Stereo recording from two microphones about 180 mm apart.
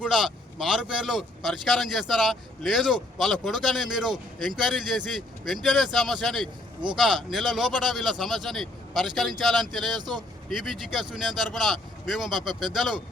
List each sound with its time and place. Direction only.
0.0 s a man's voice: 5° right (ahead or behind)
10.0 s speech: 25° right (ahead or behind)
10.5 s a man's voice: centre (ahead or behind)